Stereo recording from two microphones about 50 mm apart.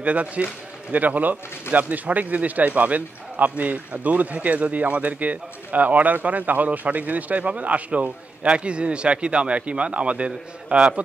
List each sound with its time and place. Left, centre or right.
0.0 s speech: right